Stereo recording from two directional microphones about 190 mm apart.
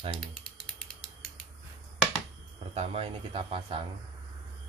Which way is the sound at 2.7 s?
30° right (ahead or behind).